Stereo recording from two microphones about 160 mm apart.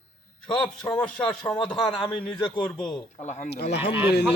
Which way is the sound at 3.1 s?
50° left (ahead or behind).